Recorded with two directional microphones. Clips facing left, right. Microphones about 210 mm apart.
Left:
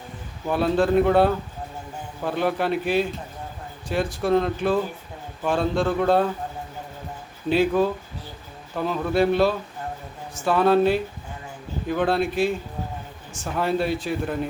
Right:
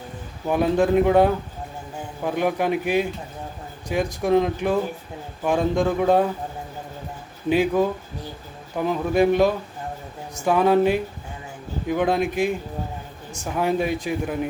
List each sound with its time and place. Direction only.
0.4 s speech: 15° right (ahead or behind)
7.5 s speech: 15° right (ahead or behind)